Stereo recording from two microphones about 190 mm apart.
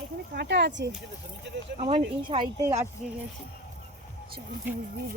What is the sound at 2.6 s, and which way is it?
Speech, 15° right (ahead or behind).